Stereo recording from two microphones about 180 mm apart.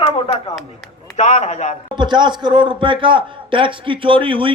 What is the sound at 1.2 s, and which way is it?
Speech, 40° left (ahead or behind).